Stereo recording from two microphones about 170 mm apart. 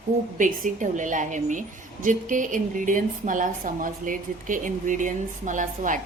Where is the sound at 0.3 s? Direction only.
50° right (ahead or behind).